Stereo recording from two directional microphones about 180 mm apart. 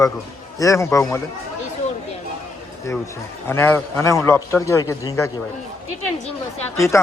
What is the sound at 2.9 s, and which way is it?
A man's voice, 15° left (ahead or behind).